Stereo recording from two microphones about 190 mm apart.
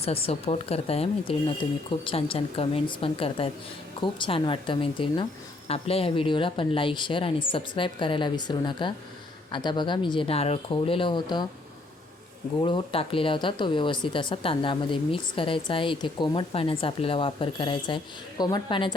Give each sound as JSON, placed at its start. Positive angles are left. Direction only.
{"t": 0.0, "sound": "a woman's voice", "side_deg": 30}
{"t": 12.6, "sound": "a woman's voice", "side_deg": 30}